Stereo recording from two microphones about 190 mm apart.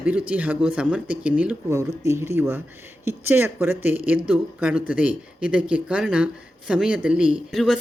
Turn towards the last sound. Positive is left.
turn(degrees=0)  # may be behind; listen again after turning